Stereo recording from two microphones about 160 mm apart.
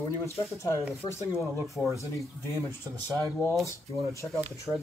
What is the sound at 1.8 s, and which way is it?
Speech, 5° left (ahead or behind).